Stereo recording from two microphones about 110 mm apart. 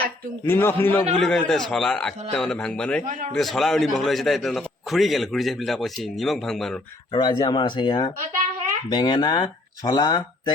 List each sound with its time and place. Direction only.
0.4 s a man's voice: 20° left (ahead or behind)
1.2 s a man's voice: 5° left (ahead or behind)
7.1 s speech: 45° left (ahead or behind)